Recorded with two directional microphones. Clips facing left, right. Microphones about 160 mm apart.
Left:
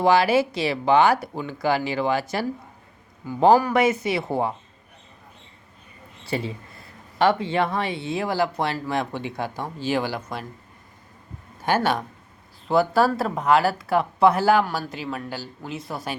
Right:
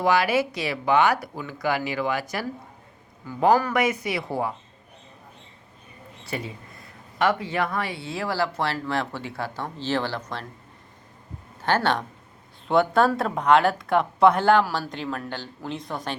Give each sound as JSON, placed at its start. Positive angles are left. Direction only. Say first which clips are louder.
{"t": 0.0, "sound": "speech", "louder": "left 3 dB", "side_deg": 30}
{"t": 3.7, "sound": "speech", "louder": "left 3 dB", "side_deg": 25}
{"t": 6.2, "sound": "speech", "louder": "left 5 dB", "side_deg": 30}
{"t": 11.6, "sound": "speech", "louder": "left 1 dB", "side_deg": 10}